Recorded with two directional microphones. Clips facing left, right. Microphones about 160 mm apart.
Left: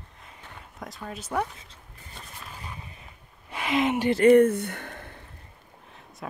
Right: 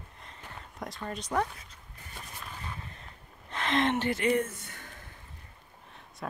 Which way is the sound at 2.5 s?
10° left (ahead or behind).